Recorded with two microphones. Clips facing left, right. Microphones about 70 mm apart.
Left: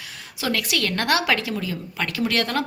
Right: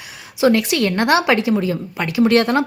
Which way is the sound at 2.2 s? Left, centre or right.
Right.